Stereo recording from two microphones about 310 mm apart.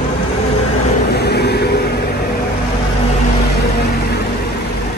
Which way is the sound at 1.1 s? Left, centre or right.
Left.